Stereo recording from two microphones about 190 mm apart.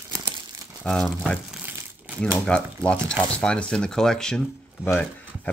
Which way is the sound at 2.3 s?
5° left (ahead or behind).